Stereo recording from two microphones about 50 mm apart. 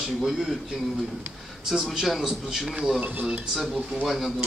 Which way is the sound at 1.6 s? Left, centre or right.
Centre.